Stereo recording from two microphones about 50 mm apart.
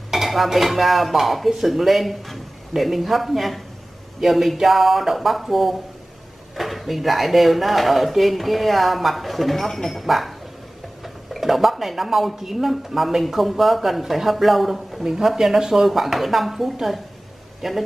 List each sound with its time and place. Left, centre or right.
0.1 s speech: centre
11.3 s speech: centre